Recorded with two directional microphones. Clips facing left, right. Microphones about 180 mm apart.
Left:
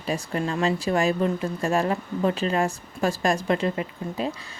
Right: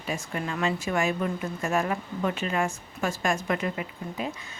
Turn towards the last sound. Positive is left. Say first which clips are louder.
# left 4 dB
turn(degrees=30)  # may be behind; listen again after turning